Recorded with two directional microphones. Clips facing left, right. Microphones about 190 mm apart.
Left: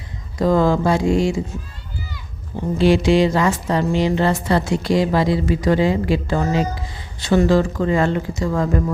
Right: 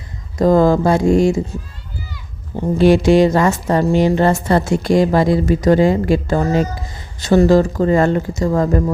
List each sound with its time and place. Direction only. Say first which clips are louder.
0.3 s speech: right 4 dB; 45° right (ahead or behind)
2.7 s speech: right 4 dB; 45° right (ahead or behind)